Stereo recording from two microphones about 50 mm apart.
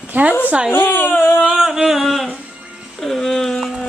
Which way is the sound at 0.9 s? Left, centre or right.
Left.